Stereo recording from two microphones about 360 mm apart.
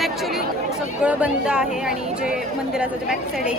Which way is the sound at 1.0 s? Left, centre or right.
Centre.